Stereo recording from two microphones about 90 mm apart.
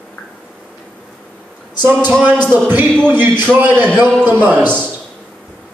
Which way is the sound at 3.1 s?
20° right (ahead or behind).